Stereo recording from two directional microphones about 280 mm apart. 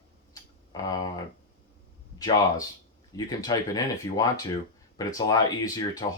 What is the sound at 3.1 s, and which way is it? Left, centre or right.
Speech, centre.